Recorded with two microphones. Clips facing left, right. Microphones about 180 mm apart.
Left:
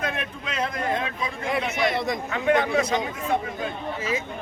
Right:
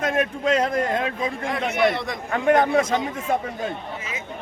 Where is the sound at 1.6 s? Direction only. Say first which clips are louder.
Right 7 dB; 60° right (ahead or behind).